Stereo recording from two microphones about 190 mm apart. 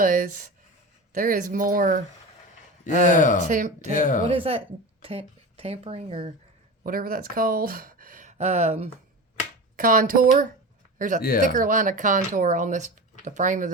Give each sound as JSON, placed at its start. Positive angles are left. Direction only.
{"t": 0.0, "sound": "speech", "side_deg": -45}
{"t": 3.1, "sound": "speech", "side_deg": 40}
{"t": 3.4, "sound": "speech", "side_deg": -45}
{"t": 3.9, "sound": "speech", "side_deg": 40}
{"t": 4.3, "sound": "speech", "side_deg": -30}
{"t": 6.8, "sound": "speech", "side_deg": -50}
{"t": 9.7, "sound": "speech", "side_deg": -45}